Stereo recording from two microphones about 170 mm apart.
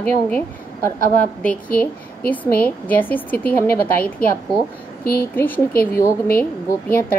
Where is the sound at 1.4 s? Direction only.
10° left (ahead or behind).